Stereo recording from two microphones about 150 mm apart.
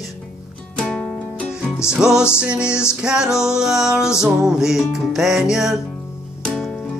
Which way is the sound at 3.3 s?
20° left (ahead or behind).